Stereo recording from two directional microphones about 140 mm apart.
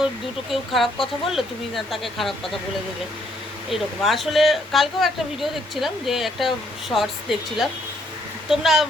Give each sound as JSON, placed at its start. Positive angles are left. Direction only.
{"t": 0.5, "sound": "speech", "side_deg": 0}
{"t": 3.7, "sound": "speech", "side_deg": 0}